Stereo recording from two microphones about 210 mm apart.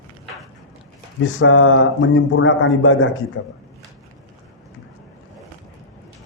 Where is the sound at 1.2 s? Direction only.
70° left (ahead or behind).